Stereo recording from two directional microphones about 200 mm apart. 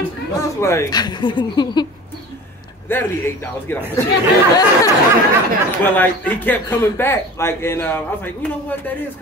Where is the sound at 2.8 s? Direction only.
10° left (ahead or behind).